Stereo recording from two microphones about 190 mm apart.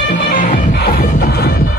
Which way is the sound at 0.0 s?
65° left (ahead or behind).